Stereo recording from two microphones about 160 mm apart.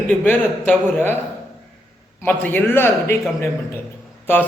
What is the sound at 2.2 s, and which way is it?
A man's voice, 10° left (ahead or behind).